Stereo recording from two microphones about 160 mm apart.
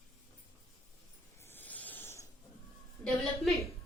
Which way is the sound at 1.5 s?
10° left (ahead or behind).